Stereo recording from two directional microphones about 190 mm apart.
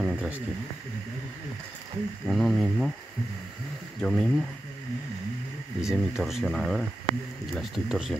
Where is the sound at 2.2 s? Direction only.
Centre (ahead or behind).